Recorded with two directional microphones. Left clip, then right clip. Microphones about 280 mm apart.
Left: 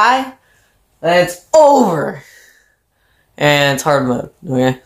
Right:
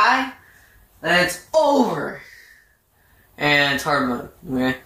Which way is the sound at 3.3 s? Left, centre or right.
Left.